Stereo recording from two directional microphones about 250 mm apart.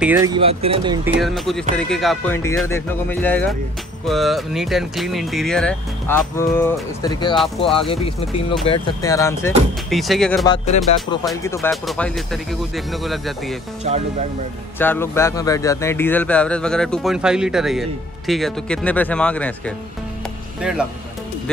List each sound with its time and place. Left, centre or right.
0.0 s speech: centre
0.3 s speech: right
1.2 s speech: centre
7.3 s speech: centre
7.9 s speech: left
9.8 s speech: centre
10.4 s speech: centre
11.4 s speech: centre
14.8 s speech: centre